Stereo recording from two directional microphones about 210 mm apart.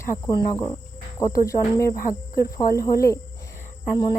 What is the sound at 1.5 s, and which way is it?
Speech, 15° left (ahead or behind).